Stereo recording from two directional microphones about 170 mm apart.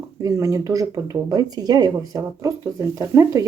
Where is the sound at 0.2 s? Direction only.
20° right (ahead or behind).